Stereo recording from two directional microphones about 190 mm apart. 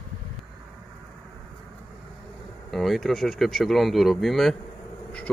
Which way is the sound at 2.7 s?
Centre (ahead or behind).